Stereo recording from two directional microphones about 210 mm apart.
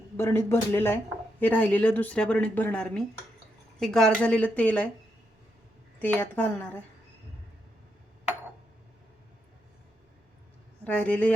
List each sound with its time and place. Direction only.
0.2 s speech: 10° left (ahead or behind)
6.0 s speech: 10° left (ahead or behind)
10.8 s speech: 5° left (ahead or behind)